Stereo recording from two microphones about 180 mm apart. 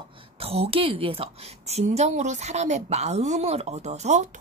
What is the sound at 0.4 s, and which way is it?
A woman's voice, 35° right (ahead or behind).